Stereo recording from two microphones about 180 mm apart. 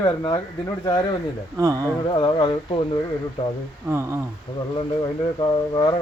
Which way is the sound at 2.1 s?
25° left (ahead or behind).